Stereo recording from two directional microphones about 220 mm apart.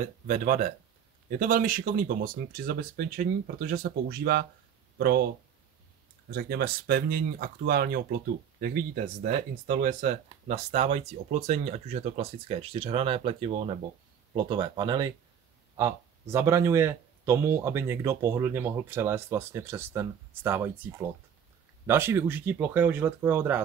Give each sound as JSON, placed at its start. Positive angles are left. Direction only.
{"t": 0.0, "sound": "speech", "side_deg": -35}
{"t": 6.3, "sound": "speech", "side_deg": -45}